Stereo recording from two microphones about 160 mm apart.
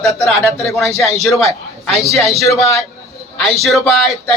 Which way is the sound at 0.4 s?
Centre (ahead or behind).